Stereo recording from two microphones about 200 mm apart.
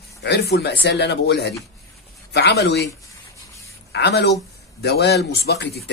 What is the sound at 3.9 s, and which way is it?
Speech, 55° left (ahead or behind).